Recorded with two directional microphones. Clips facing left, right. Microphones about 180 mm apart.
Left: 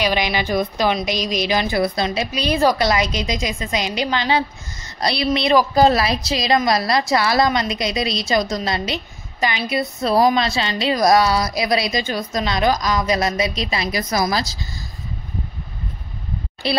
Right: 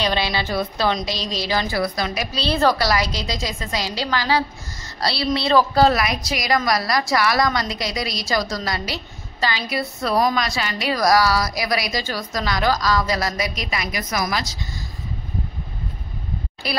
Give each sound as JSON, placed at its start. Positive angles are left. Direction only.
{"t": 0.0, "sound": "a woman's voice", "side_deg": 15}
{"t": 2.3, "sound": "a woman's voice", "side_deg": 15}
{"t": 5.9, "sound": "a woman's voice", "side_deg": 30}
{"t": 16.6, "sound": "a woman's voice", "side_deg": 25}